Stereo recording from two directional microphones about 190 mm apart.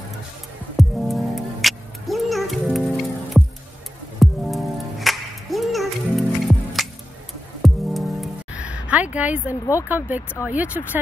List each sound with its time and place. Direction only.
0.7 s music: centre (ahead or behind)
9.8 s speech: 10° right (ahead or behind)